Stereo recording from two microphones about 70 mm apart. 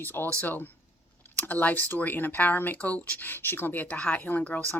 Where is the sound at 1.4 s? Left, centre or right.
Left.